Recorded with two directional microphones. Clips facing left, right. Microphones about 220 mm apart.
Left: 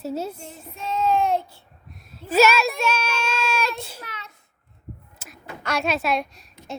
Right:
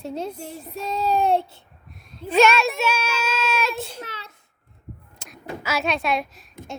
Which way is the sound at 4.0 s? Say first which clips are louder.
Right 3 dB; 30° right (ahead or behind).